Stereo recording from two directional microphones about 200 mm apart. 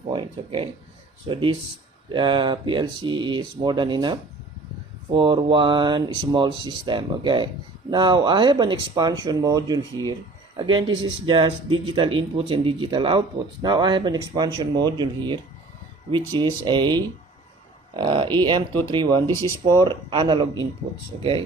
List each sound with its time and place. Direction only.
0.1 s speech: 25° right (ahead or behind)
16.4 s speech: 25° right (ahead or behind)